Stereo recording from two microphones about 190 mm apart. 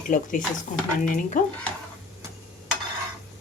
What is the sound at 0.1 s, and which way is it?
Speech, 45° left (ahead or behind).